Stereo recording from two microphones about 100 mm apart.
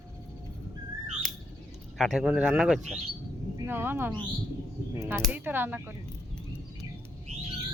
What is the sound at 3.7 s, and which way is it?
Speech, 20° right (ahead or behind).